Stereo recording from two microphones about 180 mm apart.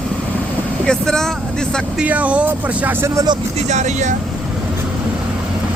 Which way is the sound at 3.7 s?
40° right (ahead or behind).